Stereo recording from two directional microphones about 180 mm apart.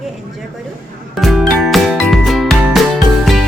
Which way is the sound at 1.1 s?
Centre (ahead or behind).